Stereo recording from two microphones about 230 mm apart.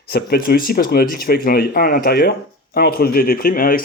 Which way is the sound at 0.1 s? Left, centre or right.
Left.